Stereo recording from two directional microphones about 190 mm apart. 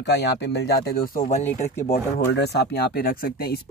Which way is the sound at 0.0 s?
60° left (ahead or behind).